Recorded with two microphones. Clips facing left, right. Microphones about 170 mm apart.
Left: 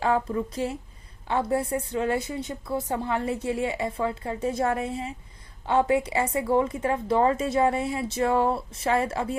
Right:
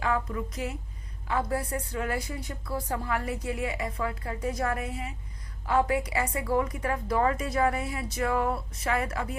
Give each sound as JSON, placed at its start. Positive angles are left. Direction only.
{"t": 0.0, "sound": "a woman's voice", "side_deg": 30}